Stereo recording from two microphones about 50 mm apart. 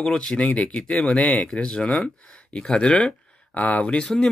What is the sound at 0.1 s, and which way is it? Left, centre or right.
Speech, left.